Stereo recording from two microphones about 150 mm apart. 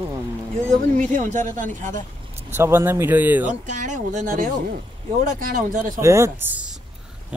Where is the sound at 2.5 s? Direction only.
15° right (ahead or behind).